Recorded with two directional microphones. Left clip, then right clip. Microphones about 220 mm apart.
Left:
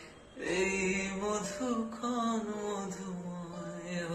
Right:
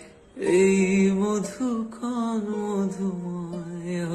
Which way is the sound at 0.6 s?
50° right (ahead or behind).